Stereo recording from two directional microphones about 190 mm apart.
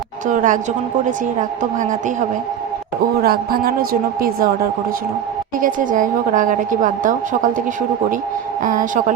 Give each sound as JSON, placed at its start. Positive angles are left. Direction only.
{"t": 0.3, "sound": "a woman's voice", "side_deg": -45}
{"t": 3.2, "sound": "a woman's voice", "side_deg": -50}
{"t": 5.5, "sound": "a woman's voice", "side_deg": -45}
{"t": 8.6, "sound": "a woman's voice", "side_deg": -45}